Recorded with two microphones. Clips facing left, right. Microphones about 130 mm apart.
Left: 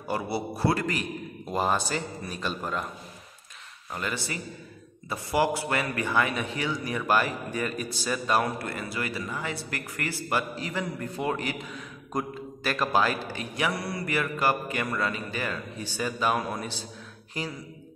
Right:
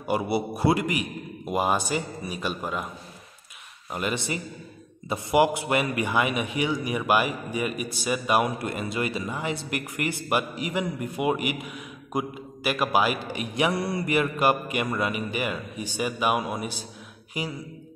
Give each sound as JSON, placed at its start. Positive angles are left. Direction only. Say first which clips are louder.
{"t": 0.0, "sound": "a man's voice", "louder": "right 4 dB", "side_deg": -15}
{"t": 3.9, "sound": "a man's voice", "louder": "right 4 dB", "side_deg": -20}